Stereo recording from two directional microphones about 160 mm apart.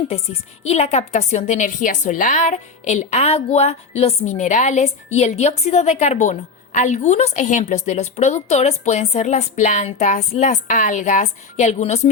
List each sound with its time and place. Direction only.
0.6 s a woman's voice: 40° left (ahead or behind)